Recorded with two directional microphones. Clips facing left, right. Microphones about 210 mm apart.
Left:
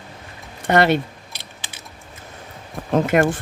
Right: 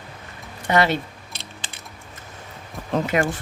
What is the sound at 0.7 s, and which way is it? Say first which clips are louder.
Speech: left 3 dB; 55° left (ahead or behind).